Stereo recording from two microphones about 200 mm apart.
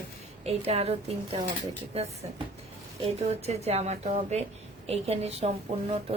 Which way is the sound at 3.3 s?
30° right (ahead or behind).